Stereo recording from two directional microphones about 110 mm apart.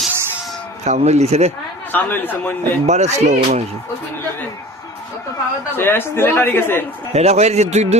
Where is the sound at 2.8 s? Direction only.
90° right.